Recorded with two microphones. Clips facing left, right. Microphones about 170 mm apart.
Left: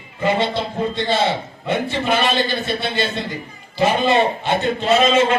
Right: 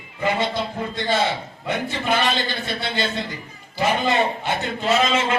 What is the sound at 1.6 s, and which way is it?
A man's voice, 20° left (ahead or behind).